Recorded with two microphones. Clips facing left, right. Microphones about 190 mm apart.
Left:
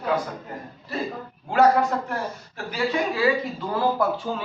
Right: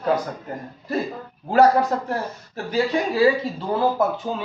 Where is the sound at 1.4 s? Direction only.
35° right (ahead or behind).